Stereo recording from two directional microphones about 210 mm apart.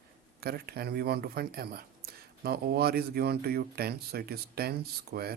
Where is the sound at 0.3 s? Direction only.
50° right (ahead or behind).